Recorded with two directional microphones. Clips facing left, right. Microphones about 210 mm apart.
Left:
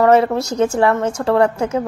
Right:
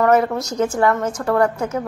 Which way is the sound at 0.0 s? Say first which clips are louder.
Left 3 dB; 25° left (ahead or behind).